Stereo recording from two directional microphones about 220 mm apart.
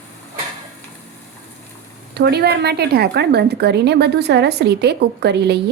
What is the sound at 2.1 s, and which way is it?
A woman's voice, 45° right (ahead or behind).